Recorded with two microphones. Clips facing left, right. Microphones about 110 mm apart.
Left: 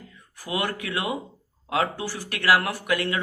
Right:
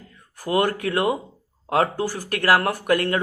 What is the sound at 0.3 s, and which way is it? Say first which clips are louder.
Speech: right 7 dB; 45° right (ahead or behind).